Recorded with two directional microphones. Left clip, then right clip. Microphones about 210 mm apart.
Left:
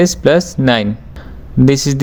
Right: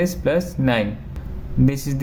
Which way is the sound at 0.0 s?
40° left (ahead or behind).